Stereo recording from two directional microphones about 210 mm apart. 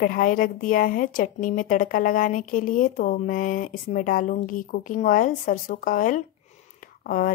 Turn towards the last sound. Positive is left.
turn(degrees=40)  # may be behind; listen again after turning